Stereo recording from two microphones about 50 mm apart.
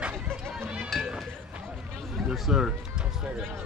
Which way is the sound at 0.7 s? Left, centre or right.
Centre.